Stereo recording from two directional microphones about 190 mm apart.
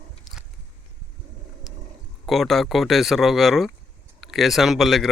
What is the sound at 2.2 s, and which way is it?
Speech, centre (ahead or behind).